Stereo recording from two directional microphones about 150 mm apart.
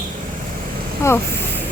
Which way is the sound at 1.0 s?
20° left (ahead or behind).